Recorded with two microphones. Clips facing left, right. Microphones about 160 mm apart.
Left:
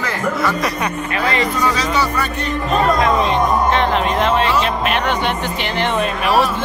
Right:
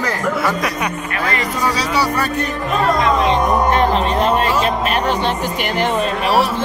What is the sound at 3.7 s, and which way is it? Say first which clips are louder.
Speech: right 1 dB; 35° right (ahead or behind).